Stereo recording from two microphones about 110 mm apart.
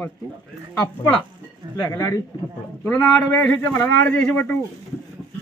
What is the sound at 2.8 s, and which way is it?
A man's voice, 15° left (ahead or behind).